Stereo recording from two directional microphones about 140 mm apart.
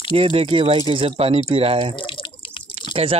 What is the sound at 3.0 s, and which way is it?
Speech, 45° right (ahead or behind).